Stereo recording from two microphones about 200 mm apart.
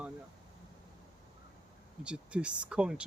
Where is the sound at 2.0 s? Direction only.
5° right (ahead or behind).